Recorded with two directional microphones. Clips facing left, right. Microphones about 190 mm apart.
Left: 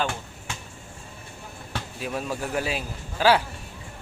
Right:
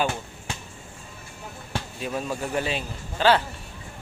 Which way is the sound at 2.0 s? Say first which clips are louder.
Even; 5° left (ahead or behind).